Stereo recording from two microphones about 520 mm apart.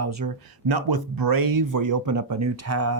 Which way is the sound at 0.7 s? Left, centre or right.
Right.